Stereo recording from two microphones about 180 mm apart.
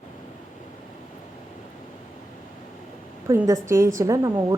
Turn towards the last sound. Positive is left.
turn(degrees=-20)  # may be behind; listen again after turning